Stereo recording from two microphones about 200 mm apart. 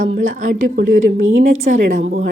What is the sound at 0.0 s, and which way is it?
A woman's voice, 40° right (ahead or behind).